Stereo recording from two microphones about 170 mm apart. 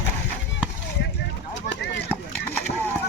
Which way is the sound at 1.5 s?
90° left.